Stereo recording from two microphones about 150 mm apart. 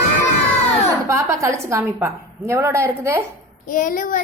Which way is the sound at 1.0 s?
20° right (ahead or behind).